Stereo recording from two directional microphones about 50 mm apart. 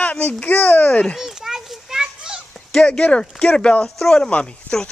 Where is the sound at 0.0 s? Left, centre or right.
Left.